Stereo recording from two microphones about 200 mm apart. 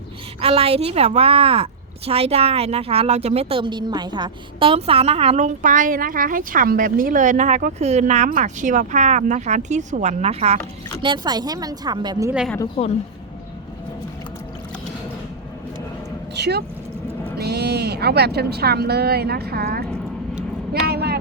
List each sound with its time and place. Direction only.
0.4 s a woman's voice: 30° right (ahead or behind)
11.0 s speech: 20° right (ahead or behind)
16.3 s vehicle: 55° right (ahead or behind)
17.3 s speech: 55° right (ahead or behind)
20.8 s vehicle: 55° right (ahead or behind)